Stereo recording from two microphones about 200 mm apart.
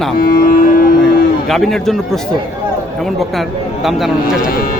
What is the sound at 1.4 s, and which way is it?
A man's voice, centre (ahead or behind).